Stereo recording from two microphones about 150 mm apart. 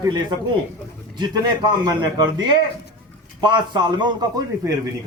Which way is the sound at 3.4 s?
30° right (ahead or behind).